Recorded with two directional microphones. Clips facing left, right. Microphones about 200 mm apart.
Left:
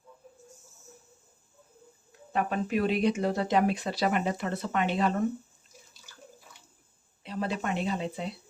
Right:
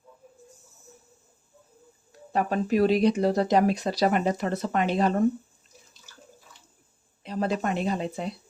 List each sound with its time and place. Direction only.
2.3 s speech: 35° right (ahead or behind)
7.2 s speech: 40° right (ahead or behind)